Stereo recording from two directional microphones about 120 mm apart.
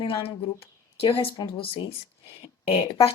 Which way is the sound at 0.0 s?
45° left (ahead or behind).